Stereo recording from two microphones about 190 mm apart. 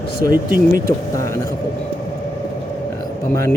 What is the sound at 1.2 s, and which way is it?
Speech, 15° left (ahead or behind).